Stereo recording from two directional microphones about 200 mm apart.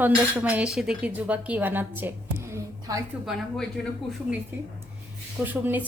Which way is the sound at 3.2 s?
Centre (ahead or behind).